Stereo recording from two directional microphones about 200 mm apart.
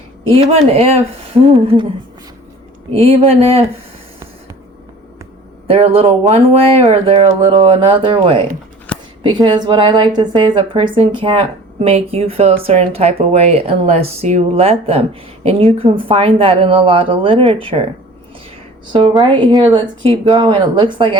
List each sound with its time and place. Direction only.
0.3 s a woman's voice: 30° right (ahead or behind)
3.0 s a woman's voice: 30° right (ahead or behind)
5.6 s a woman's voice: 30° right (ahead or behind)
8.9 s a sound: 5° left (ahead or behind)
9.2 s a woman's voice: 20° right (ahead or behind)
19.2 s a woman's voice: 20° right (ahead or behind)